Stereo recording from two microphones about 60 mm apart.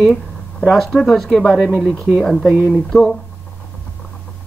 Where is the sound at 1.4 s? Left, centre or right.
Centre.